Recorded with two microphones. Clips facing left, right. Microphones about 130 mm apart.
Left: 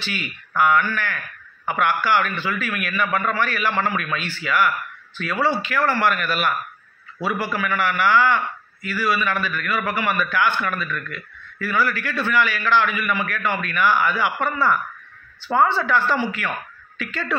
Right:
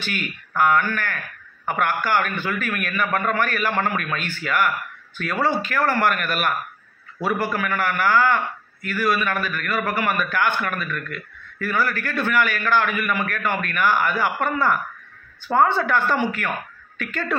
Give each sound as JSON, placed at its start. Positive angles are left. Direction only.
{"t": 0.6, "sound": "a man's voice", "side_deg": -45}